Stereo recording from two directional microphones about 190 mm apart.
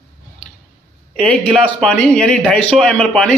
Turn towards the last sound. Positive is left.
turn(degrees=5)  # may be behind; listen again after turning